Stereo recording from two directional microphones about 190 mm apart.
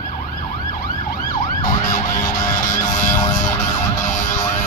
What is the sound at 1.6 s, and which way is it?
Emergency vehicle, 45° left (ahead or behind).